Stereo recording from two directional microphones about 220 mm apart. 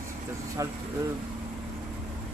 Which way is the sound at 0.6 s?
15° right (ahead or behind).